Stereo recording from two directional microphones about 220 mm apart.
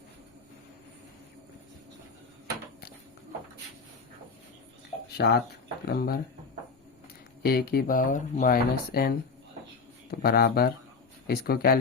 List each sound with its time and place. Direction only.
5.1 s speech: 45° left (ahead or behind)
7.4 s speech: 45° left (ahead or behind)